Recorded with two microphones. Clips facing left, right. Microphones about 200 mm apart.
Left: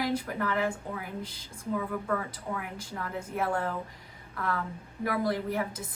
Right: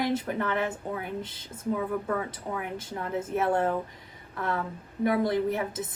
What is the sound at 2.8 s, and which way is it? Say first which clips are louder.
Speech: right 5 dB; 20° right (ahead or behind).